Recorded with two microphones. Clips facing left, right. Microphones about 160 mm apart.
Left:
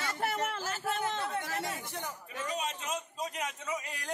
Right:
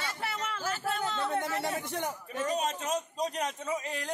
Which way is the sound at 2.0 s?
40° right (ahead or behind).